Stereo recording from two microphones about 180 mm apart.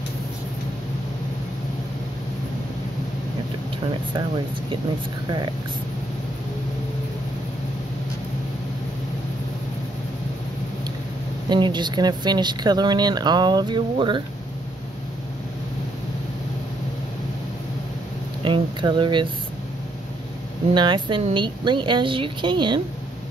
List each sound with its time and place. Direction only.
11.4 s speech: 25° right (ahead or behind)
18.4 s speech: 25° right (ahead or behind)
20.7 s speech: 25° right (ahead or behind)